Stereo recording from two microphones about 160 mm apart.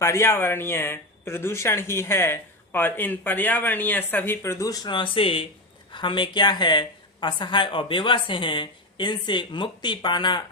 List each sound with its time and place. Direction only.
0.0 s speech: 15° left (ahead or behind)